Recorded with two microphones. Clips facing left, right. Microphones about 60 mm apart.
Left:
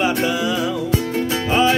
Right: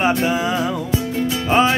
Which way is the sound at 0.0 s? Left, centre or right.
Right.